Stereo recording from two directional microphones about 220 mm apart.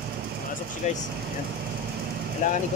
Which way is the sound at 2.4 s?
35° left (ahead or behind).